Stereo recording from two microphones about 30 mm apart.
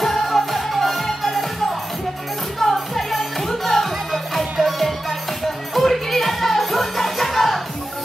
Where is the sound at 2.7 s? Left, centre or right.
Centre.